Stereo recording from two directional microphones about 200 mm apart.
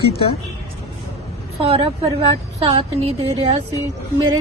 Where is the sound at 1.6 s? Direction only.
30° right (ahead or behind).